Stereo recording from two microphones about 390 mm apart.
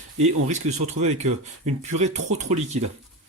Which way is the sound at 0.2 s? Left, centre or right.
Centre.